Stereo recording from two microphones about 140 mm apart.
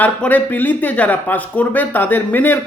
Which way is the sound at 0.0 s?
10° left (ahead or behind).